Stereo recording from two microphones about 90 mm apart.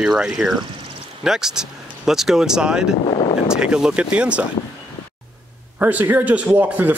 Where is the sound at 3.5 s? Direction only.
10° right (ahead or behind).